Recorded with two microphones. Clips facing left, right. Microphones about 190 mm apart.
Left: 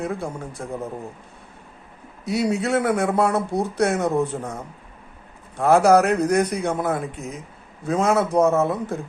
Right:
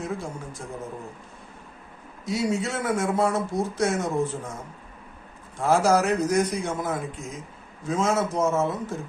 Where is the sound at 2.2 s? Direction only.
65° left (ahead or behind).